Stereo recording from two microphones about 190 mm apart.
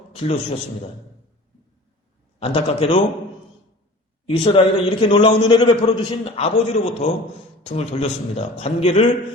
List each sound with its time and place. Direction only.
2.4 s a man's voice: 30° left (ahead or behind)
4.3 s a man's voice: 30° left (ahead or behind)